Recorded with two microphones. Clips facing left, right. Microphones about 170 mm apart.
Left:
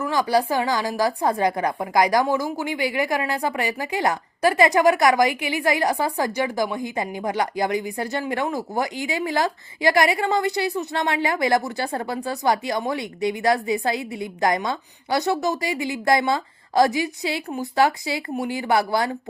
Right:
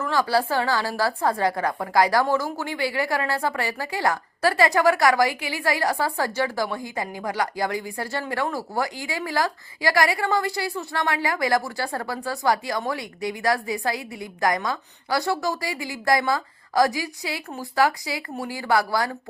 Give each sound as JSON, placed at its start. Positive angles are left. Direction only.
{"t": 0.0, "sound": "a woman's voice", "side_deg": 15}